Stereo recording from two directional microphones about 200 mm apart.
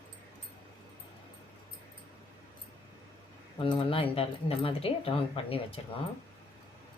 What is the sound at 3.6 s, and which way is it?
Speech, 25° left (ahead or behind).